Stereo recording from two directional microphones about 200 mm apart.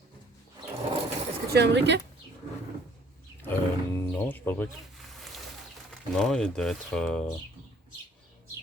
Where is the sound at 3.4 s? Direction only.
10° left (ahead or behind).